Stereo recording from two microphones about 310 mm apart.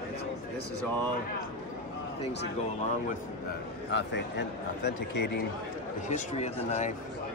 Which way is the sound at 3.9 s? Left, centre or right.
Left.